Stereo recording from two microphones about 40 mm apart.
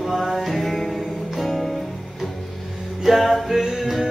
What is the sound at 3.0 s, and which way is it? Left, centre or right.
Music, centre.